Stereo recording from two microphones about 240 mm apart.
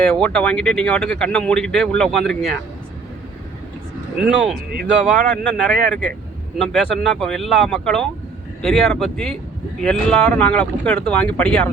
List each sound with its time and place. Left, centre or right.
0.0 s speech: centre
4.2 s speech: centre